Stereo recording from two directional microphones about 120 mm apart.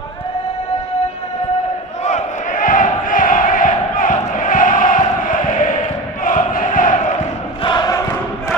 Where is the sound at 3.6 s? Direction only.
90° left.